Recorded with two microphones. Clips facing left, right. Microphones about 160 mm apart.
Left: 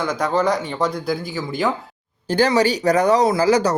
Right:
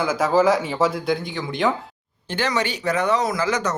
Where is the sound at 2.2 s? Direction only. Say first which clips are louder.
Left 7 dB; 35° left (ahead or behind).